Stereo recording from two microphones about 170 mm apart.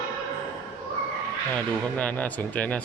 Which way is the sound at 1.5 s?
10° left (ahead or behind).